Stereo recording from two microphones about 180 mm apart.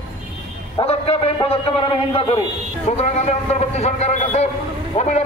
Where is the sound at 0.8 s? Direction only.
35° left (ahead or behind).